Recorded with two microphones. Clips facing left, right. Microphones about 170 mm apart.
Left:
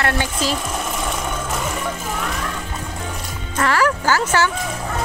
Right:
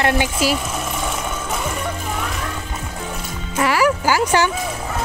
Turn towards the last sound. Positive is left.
turn(degrees=-15)  # may be behind; listen again after turning